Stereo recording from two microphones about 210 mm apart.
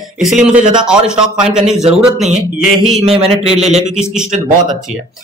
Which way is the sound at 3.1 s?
30° right (ahead or behind).